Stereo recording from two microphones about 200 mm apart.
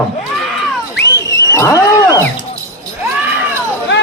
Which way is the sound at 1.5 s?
15° left (ahead or behind).